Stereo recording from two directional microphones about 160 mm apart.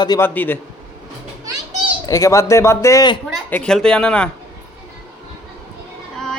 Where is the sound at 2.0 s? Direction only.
20° left (ahead or behind).